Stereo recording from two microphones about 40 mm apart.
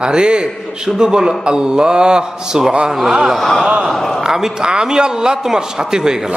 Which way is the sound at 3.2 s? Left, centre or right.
Centre.